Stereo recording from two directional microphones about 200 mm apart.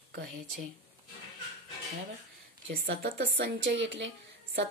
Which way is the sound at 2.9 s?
50° right (ahead or behind).